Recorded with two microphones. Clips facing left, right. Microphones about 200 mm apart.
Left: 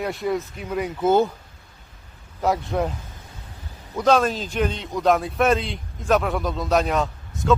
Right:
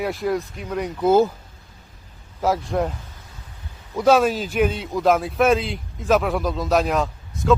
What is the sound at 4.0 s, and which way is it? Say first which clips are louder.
A man's voice: right 2 dB; 5° right (ahead or behind).